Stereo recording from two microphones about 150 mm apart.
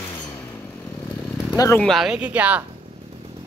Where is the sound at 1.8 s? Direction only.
Centre (ahead or behind).